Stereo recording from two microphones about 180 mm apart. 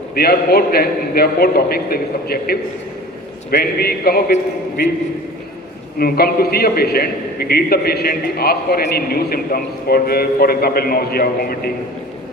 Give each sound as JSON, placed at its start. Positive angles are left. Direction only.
{"t": 0.1, "sound": "a man's voice", "side_deg": 60}
{"t": 6.0, "sound": "a man's voice", "side_deg": 55}